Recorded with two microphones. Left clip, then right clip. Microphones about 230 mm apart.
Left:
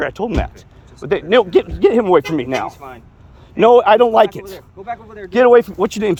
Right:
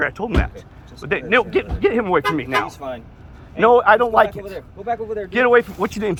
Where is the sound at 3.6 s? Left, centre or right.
Left.